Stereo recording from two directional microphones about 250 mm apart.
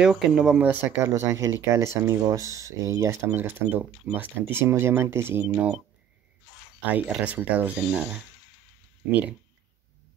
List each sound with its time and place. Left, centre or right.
0.0 s speech: centre
6.9 s speech: centre